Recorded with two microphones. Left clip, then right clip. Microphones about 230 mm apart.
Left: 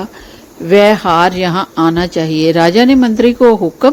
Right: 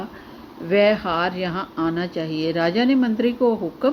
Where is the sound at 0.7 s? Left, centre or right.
Left.